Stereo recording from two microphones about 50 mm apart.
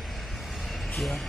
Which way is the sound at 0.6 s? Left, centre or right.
Centre.